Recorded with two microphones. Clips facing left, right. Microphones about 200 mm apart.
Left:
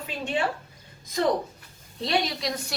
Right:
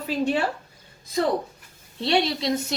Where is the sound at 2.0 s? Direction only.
30° right (ahead or behind).